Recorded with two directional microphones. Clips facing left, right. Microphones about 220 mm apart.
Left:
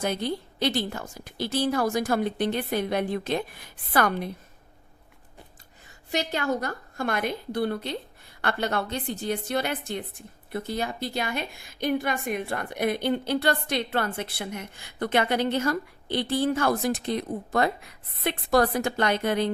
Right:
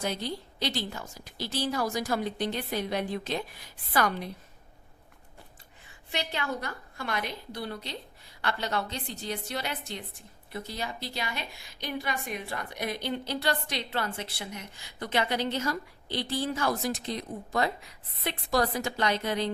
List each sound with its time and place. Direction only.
0.0 s a woman's voice: 55° left (ahead or behind)
6.1 s a woman's voice: 45° left (ahead or behind)